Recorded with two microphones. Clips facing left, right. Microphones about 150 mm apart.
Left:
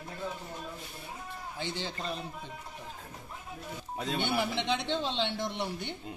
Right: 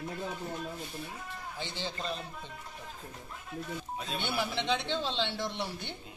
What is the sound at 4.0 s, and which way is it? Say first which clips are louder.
Speech: left 7 dB; 75° left (ahead or behind).